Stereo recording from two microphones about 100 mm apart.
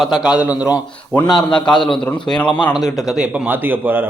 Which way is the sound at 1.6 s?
50° left (ahead or behind).